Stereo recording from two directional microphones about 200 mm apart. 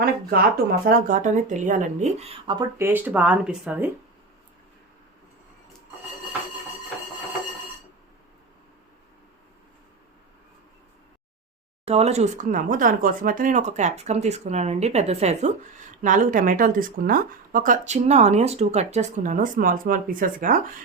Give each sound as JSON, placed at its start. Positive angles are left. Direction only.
{"t": 0.0, "sound": "a woman's voice", "side_deg": -50}
{"t": 11.9, "sound": "a woman's voice", "side_deg": -30}